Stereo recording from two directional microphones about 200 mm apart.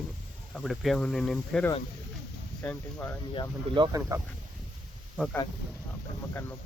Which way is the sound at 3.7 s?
25° right (ahead or behind).